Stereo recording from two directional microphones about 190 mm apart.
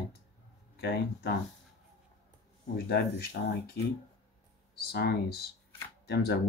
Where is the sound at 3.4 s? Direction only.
55° left (ahead or behind).